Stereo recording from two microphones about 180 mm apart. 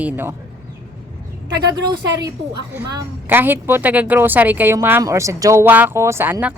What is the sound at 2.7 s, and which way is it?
Speech, 15° right (ahead or behind).